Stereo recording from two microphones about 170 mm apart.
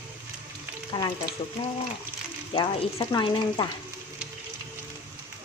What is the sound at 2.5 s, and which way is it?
Speech, 25° left (ahead or behind).